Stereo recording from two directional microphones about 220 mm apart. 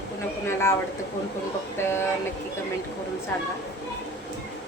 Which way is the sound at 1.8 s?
10° left (ahead or behind).